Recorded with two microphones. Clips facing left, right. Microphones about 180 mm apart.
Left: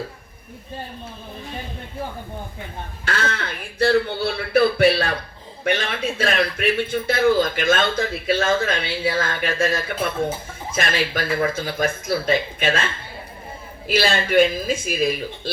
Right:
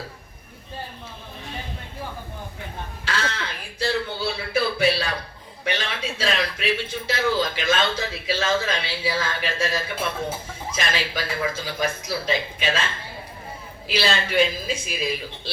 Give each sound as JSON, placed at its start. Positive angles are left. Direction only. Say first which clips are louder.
{"t": 3.0, "sound": "a man's voice", "louder": "left 3 dB", "side_deg": 50}
{"t": 13.8, "sound": "a man's voice", "louder": "left 4 dB", "side_deg": 50}